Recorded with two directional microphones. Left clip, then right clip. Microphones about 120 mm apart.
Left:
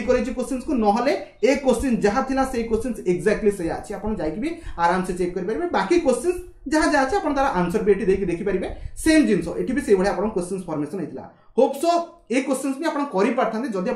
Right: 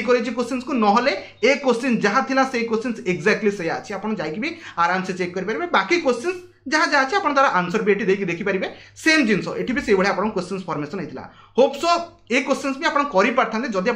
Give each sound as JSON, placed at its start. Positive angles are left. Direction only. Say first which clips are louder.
{"t": 0.0, "sound": "speech", "louder": "right 2 dB", "side_deg": 40}